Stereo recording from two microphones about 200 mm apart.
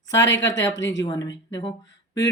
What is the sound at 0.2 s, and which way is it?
Speech, 65° left (ahead or behind).